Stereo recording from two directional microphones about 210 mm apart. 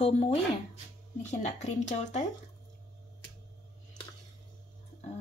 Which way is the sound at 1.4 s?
35° left (ahead or behind).